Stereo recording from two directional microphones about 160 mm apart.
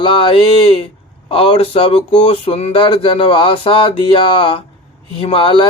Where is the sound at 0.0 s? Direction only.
30° left (ahead or behind).